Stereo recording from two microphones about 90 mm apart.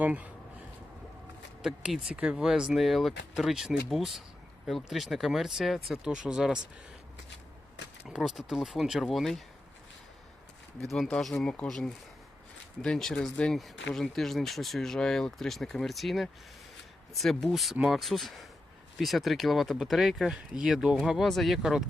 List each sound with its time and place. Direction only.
0.0 s speech: 15° right (ahead or behind)
1.6 s speech: 10° right (ahead or behind)
8.0 s speech: 5° right (ahead or behind)
10.8 s speech: 5° left (ahead or behind)
12.8 s speech: 5° left (ahead or behind)